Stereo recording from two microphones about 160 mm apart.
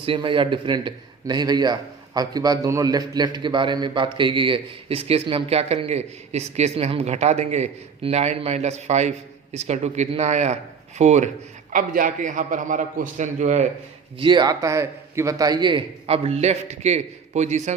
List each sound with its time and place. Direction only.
0.0 s a man's voice: 30° right (ahead or behind)
11.7 s a man's voice: 60° right (ahead or behind)
14.2 s a man's voice: 30° right (ahead or behind); by 17.7 s 45° right (ahead or behind)